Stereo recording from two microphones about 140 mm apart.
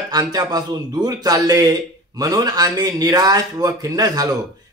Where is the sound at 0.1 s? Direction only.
30° right (ahead or behind).